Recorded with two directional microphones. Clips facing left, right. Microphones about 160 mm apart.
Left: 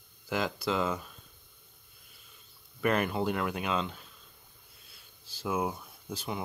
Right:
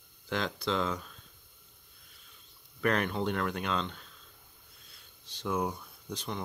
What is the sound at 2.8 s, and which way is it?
Speech, 5° left (ahead or behind).